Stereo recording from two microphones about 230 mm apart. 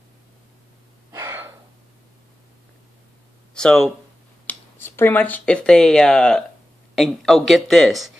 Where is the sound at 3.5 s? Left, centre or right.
Centre.